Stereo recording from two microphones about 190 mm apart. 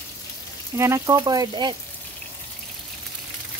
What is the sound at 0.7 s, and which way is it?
Speech, 15° right (ahead or behind).